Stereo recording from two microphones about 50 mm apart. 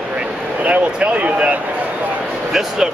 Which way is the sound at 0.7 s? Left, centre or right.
Right.